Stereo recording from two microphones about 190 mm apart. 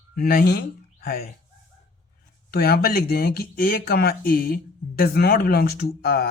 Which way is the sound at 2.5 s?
55° left (ahead or behind).